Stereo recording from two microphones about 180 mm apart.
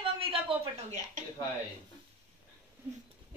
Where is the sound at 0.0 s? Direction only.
30° right (ahead or behind).